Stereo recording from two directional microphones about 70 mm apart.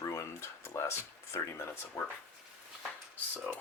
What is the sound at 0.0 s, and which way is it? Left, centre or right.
Speech, left.